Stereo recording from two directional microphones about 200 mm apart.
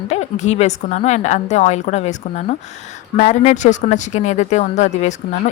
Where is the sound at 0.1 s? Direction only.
35° left (ahead or behind).